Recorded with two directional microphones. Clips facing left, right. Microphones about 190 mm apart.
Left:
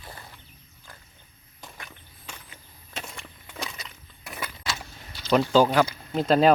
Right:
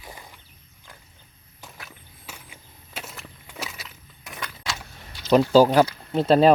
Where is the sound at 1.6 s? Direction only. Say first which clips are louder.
Even; 5° right (ahead or behind).